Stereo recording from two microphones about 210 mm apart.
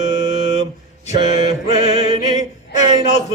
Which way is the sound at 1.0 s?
35° left (ahead or behind).